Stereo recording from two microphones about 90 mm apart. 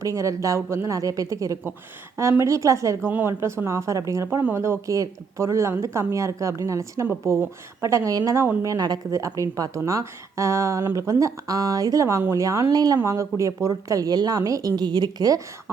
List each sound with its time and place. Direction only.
0.0 s a woman's voice: 40° right (ahead or behind)
3.1 s a woman's voice: 25° right (ahead or behind); by 13.0 s 45° right (ahead or behind)
13.1 s a woman's voice: 35° right (ahead or behind)